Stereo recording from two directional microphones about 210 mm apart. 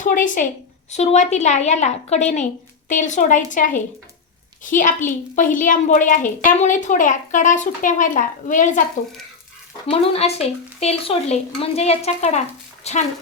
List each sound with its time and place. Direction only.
0.0 s a woman's voice: 40° left (ahead or behind)
9.8 s a woman's voice: 30° left (ahead or behind)